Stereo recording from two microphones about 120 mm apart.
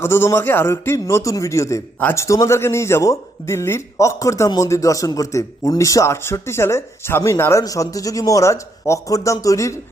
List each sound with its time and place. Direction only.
0.0 s speech: 20° left (ahead or behind)